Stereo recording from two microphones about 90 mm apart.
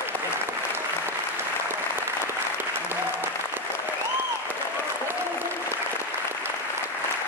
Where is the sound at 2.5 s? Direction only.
20° right (ahead or behind).